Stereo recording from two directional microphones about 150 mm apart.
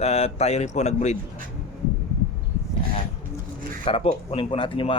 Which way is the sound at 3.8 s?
40° left (ahead or behind).